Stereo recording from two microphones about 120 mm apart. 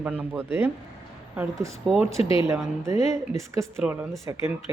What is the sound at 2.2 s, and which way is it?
Speech, 50° left (ahead or behind).